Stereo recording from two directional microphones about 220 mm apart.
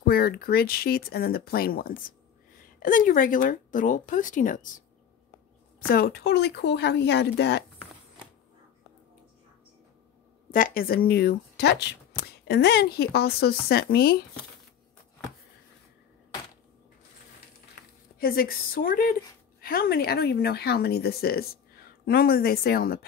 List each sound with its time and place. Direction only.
0.0 s speech: 45° left (ahead or behind)
5.9 s speech: 45° left (ahead or behind)
10.5 s a woman's voice: 40° left (ahead or behind)
18.2 s speech: 40° left (ahead or behind)